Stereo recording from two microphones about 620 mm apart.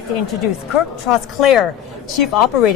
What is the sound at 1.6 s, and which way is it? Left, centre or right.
Speech, left.